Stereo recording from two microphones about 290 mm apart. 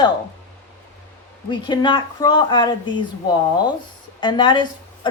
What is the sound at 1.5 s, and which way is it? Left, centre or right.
A woman's voice, centre.